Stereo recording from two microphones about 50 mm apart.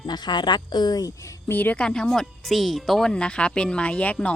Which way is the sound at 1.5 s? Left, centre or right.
Left.